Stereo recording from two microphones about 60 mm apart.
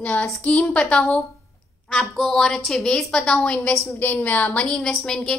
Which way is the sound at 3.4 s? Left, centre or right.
Left.